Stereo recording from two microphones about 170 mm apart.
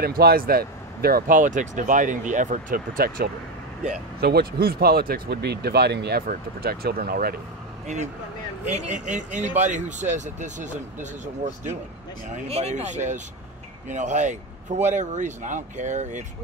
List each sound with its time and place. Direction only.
0.0 s speech: 65° right (ahead or behind)
7.8 s speech: 45° right (ahead or behind)
12.4 s speech: 40° right (ahead or behind)